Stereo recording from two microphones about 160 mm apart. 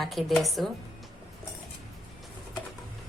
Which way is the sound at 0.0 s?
Centre (ahead or behind).